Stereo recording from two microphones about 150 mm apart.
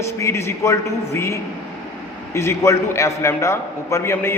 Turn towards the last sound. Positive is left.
turn(degrees=15)  # may be behind; listen again after turning